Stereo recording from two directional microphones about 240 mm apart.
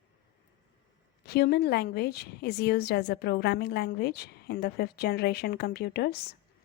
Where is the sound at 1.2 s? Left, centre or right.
Left.